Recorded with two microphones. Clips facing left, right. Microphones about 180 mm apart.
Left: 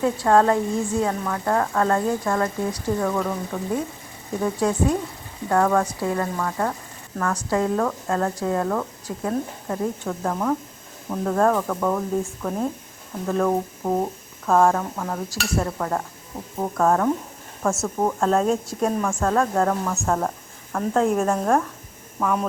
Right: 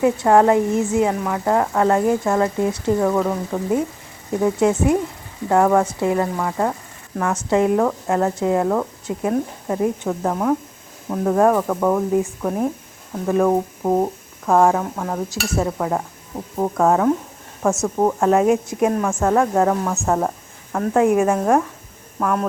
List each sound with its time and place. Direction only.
0.0 s a woman's voice: 15° right (ahead or behind)
13.5 s speech: 25° right (ahead or behind)
14.4 s a woman's voice: 10° right (ahead or behind)